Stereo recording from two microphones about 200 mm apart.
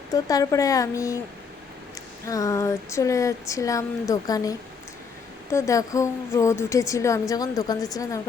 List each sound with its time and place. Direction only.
0.1 s a woman's voice: 15° left (ahead or behind)
2.2 s a woman's voice: 15° left (ahead or behind)